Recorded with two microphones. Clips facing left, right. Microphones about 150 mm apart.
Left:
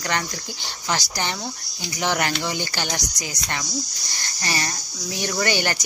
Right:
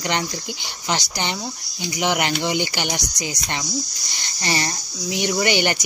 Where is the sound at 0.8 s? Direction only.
20° right (ahead or behind).